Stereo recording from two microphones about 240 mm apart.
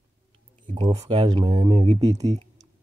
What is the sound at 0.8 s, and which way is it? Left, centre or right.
Speech, centre.